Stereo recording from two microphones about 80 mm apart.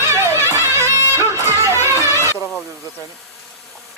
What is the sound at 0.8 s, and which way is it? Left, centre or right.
Music, left.